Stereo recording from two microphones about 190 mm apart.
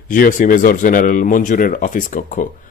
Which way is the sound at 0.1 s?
45° left (ahead or behind).